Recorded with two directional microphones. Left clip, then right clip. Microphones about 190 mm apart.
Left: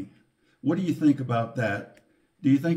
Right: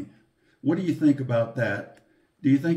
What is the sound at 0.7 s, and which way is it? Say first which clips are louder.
Speech: right 1 dB; 25° left (ahead or behind).